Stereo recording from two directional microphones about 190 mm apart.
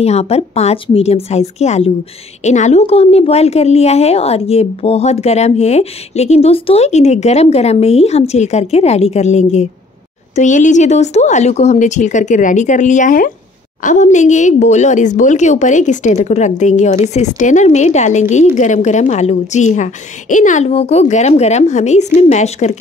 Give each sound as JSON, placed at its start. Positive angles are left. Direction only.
{"t": 0.0, "sound": "a woman's voice", "side_deg": 35}